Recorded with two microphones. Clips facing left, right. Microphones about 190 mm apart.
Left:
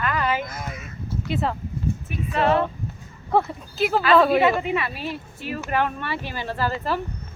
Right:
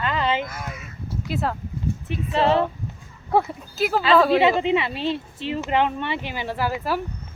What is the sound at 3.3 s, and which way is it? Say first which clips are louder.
Speech: even; centre (ahead or behind).